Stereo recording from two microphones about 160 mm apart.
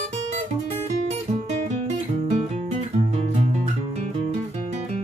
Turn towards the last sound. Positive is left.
turn(degrees=-45)  # may be behind; listen again after turning